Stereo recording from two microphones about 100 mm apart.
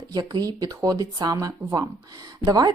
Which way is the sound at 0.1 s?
40° right (ahead or behind).